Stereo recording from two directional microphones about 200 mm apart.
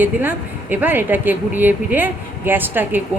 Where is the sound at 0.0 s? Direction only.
10° right (ahead or behind).